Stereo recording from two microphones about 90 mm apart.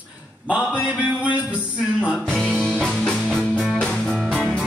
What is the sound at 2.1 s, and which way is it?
Music, 10° left (ahead or behind).